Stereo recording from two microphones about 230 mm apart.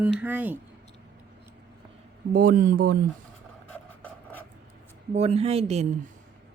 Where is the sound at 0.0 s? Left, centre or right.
Centre.